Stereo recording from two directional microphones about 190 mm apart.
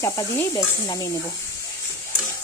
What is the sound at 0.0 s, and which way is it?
Speech, 15° left (ahead or behind).